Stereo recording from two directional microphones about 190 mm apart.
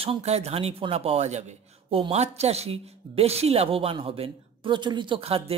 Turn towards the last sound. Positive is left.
turn(degrees=-30)  # may be behind; listen again after turning